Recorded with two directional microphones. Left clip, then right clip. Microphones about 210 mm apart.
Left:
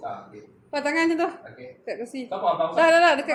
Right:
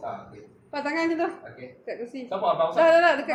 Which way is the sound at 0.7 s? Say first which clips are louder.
Left 3 dB; 45° left (ahead or behind).